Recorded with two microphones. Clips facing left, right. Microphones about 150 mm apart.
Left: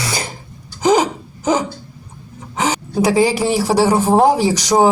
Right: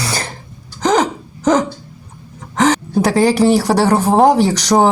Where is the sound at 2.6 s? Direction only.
10° left (ahead or behind).